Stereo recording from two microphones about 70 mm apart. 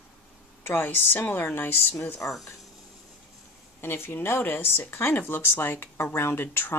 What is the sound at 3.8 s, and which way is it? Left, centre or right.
Speech, left.